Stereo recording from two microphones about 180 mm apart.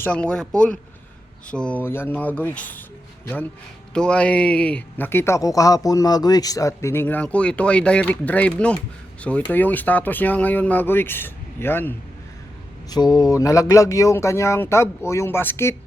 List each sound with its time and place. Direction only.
0.0 s speech: 5° left (ahead or behind)
12.9 s speech: 20° left (ahead or behind)